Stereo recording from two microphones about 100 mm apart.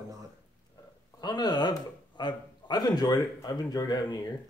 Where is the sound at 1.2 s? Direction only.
45° left (ahead or behind).